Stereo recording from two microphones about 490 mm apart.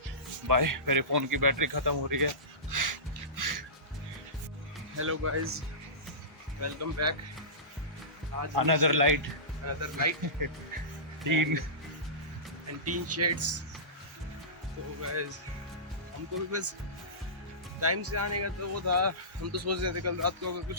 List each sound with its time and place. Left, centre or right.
0.4 s speech: right
4.9 s speech: right
8.4 s speech: right
12.8 s speech: right
16.5 s speech: right
17.7 s speech: right